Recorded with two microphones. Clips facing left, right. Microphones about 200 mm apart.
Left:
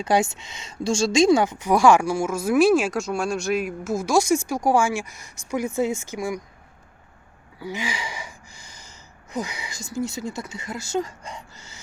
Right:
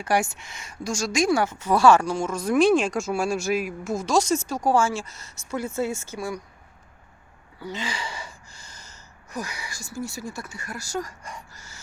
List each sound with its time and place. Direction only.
0.0 s a woman's voice: 20° left (ahead or behind)
7.6 s speech: 10° left (ahead or behind)